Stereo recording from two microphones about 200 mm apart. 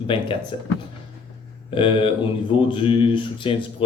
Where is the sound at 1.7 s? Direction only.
25° left (ahead or behind).